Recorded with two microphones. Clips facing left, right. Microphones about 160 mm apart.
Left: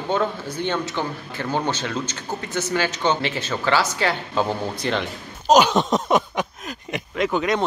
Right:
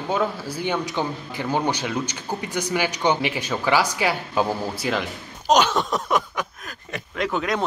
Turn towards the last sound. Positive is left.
turn(degrees=0)  # may be behind; listen again after turning